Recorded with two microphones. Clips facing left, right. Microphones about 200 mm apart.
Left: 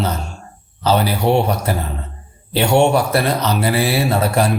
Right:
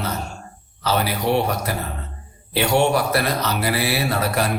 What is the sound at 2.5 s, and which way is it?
A man's voice, 25° left (ahead or behind).